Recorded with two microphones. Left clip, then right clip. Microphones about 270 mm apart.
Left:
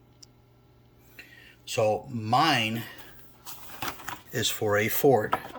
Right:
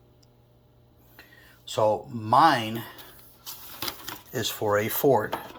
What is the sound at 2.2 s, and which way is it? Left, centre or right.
Speech, centre.